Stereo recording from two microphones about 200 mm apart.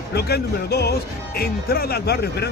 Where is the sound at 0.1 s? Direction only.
55° left (ahead or behind).